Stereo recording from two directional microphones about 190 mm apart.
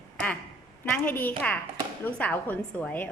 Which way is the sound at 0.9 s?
10° left (ahead or behind).